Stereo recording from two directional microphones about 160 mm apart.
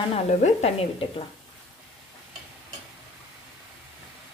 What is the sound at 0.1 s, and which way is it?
A woman's voice, 45° left (ahead or behind).